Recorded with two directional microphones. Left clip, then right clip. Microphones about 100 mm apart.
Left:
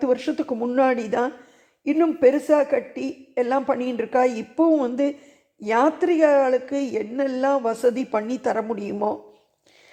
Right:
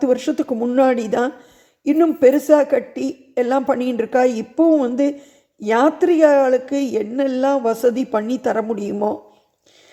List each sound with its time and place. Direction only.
0.0 s a woman's voice: 50° right (ahead or behind)